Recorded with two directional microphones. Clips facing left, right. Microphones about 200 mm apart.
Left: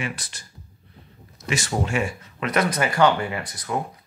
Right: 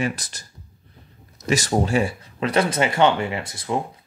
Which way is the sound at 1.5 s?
35° right (ahead or behind).